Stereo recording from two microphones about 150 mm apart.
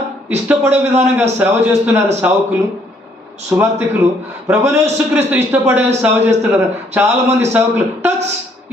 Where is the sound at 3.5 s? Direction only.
15° right (ahead or behind).